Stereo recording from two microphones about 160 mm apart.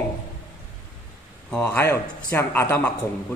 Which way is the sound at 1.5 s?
10° left (ahead or behind).